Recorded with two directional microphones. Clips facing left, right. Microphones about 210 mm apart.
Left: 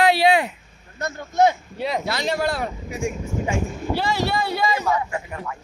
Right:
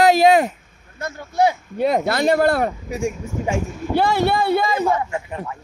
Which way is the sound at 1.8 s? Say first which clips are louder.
Right 12 dB; 50° right (ahead or behind).